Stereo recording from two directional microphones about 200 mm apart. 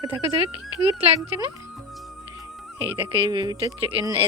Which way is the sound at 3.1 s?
25° right (ahead or behind).